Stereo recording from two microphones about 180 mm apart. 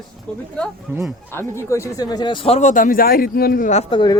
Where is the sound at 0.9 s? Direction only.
10° right (ahead or behind).